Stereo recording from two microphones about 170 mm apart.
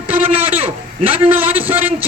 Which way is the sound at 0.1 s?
10° right (ahead or behind).